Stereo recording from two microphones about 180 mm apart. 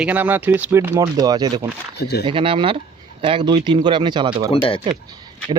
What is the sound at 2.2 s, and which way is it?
Speech, 30° right (ahead or behind).